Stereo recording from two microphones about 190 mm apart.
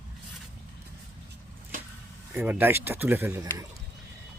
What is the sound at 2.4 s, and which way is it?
Speech, 10° right (ahead or behind).